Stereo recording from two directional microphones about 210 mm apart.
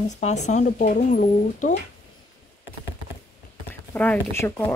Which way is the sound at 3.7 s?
10° left (ahead or behind).